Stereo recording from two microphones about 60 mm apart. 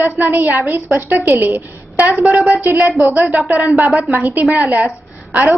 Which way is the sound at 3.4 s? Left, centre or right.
Right.